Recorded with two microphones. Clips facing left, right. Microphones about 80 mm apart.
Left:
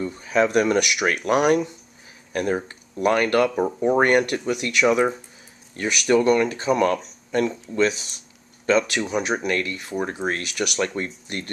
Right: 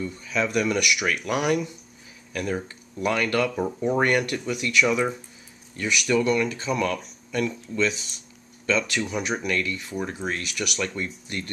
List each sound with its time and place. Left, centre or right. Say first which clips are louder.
0.0 s speech: left 6 dB; left
8.7 s speech: left 5 dB; left